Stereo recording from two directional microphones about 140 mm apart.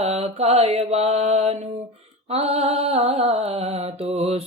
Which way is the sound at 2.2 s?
50° right (ahead or behind).